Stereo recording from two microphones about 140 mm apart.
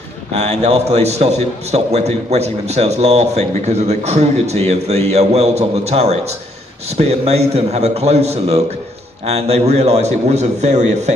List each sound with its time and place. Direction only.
0.4 s a man's voice: 50° right (ahead or behind)